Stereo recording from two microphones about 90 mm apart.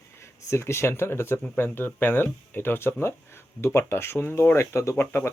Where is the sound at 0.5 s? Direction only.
30° left (ahead or behind).